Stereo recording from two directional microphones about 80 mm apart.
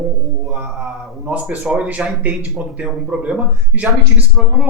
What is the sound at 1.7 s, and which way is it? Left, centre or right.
Speech, centre.